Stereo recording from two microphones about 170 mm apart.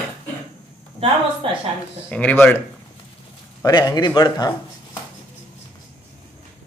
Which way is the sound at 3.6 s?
25° left (ahead or behind).